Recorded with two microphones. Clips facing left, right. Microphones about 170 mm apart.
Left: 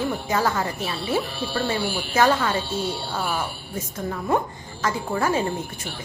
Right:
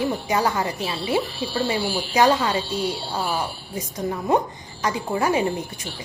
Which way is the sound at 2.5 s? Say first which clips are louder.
Right 1 dB; 55° left (ahead or behind).